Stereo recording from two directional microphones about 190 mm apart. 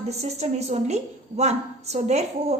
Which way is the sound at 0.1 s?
35° right (ahead or behind).